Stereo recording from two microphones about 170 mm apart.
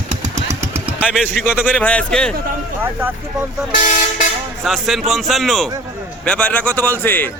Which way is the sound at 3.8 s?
50° left (ahead or behind).